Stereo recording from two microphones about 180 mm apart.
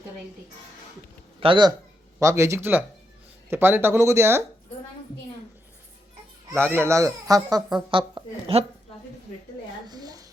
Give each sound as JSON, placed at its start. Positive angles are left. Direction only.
{"t": 1.4, "sound": "speech", "side_deg": -25}
{"t": 2.1, "sound": "speech", "side_deg": -15}
{"t": 6.5, "sound": "a woman's voice", "side_deg": -10}
{"t": 9.8, "sound": "a sound", "side_deg": -20}